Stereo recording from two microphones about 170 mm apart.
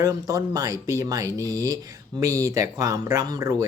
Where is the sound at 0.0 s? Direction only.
20° right (ahead or behind).